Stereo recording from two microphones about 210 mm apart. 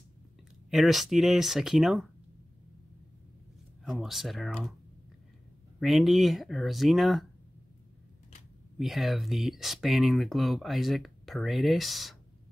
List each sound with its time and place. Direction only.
0.7 s speech: centre (ahead or behind)
3.8 s speech: centre (ahead or behind)
5.8 s speech: centre (ahead or behind)
8.7 s speech: centre (ahead or behind)